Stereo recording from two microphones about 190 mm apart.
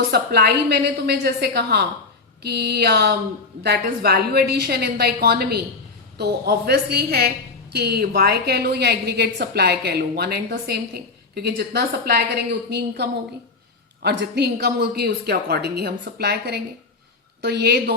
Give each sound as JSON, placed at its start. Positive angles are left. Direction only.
{"t": 0.0, "sound": "a woman's voice", "side_deg": -55}